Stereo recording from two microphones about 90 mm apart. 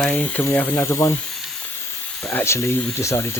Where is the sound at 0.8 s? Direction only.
30° left (ahead or behind).